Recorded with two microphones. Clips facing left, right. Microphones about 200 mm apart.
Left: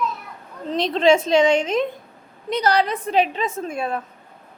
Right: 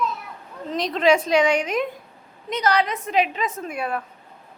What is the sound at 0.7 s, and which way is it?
A woman's voice, 30° left (ahead or behind).